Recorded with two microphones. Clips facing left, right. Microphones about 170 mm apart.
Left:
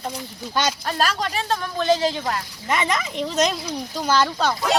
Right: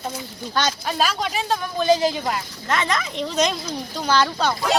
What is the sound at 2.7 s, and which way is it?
Speech, 10° left (ahead or behind).